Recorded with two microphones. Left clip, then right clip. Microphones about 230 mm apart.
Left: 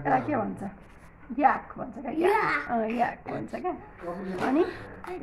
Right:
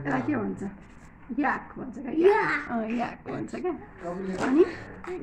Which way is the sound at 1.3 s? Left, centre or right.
Centre.